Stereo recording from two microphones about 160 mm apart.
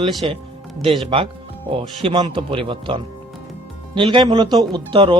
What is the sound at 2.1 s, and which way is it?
Speech, 30° right (ahead or behind).